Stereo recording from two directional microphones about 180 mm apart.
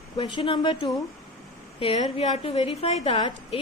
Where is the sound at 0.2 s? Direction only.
25° left (ahead or behind).